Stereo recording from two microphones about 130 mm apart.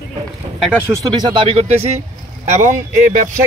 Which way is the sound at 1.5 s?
55° right (ahead or behind).